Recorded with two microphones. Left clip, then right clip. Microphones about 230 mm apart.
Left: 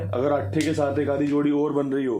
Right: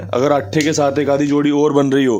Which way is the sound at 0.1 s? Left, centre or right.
Right.